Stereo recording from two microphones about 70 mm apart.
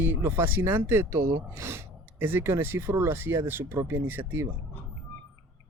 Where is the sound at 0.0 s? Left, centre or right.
Right.